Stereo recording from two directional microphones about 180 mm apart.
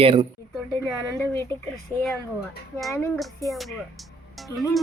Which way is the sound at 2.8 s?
Centre (ahead or behind).